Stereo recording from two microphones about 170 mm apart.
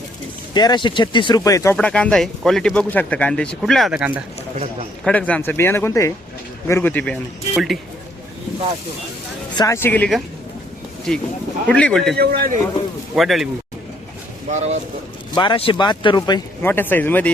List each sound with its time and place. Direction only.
0.5 s speech: 25° left (ahead or behind)
1.7 s speech: 5° left (ahead or behind)
5.0 s speech: 10° left (ahead or behind)
9.6 s speech: 15° left (ahead or behind)
12.1 s a man's voice: 65° right (ahead or behind)
13.1 s speech: centre (ahead or behind)
14.5 s speech: 40° right (ahead or behind)
15.4 s speech: 30° left (ahead or behind)
16.6 s speech: 10° left (ahead or behind)